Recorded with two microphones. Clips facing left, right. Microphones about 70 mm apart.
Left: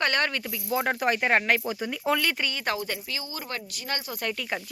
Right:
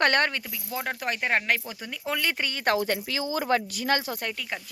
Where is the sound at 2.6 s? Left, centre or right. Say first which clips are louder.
Right 5 dB; right.